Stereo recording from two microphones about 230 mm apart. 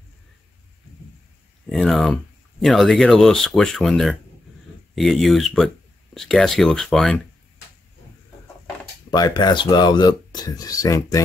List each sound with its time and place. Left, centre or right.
1.7 s speech: centre
9.1 s speech: centre